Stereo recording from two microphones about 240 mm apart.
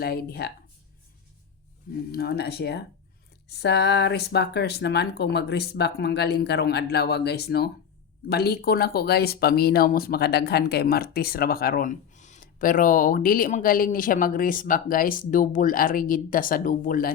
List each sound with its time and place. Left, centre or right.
0.0 s speech: left
2.1 s speech: left